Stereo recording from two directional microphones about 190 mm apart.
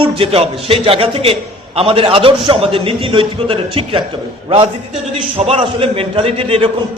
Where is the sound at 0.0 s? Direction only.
30° right (ahead or behind).